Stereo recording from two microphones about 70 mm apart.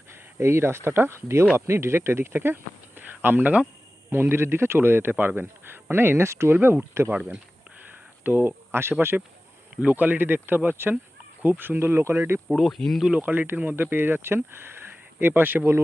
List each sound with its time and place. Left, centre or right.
0.1 s speech: right
8.2 s speech: right
12.5 s speech: centre
13.1 s speech: right